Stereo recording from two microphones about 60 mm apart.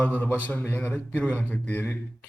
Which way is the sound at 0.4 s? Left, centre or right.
Left.